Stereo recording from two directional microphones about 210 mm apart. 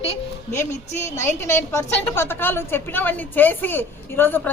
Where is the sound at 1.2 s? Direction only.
10° left (ahead or behind).